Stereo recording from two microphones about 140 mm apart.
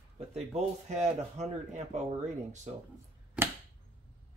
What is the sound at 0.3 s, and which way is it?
Speech, 50° right (ahead or behind).